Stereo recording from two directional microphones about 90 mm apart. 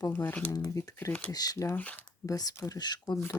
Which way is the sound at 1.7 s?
20° left (ahead or behind).